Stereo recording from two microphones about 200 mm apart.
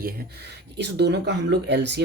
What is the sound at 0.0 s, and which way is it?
Speech, 55° right (ahead or behind).